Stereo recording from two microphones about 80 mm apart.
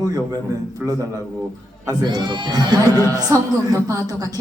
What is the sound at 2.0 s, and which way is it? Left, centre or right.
A woman's voice, right.